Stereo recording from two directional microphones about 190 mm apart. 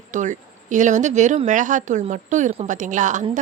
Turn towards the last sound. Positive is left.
turn(degrees=-40)  # may be behind; listen again after turning